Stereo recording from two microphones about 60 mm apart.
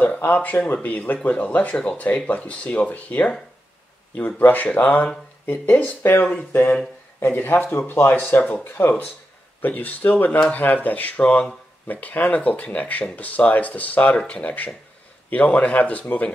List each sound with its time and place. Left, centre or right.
0.0 s speech: left
4.4 s speech: left